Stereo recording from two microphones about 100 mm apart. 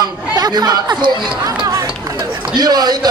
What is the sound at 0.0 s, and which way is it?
Chatter, 45° right (ahead or behind).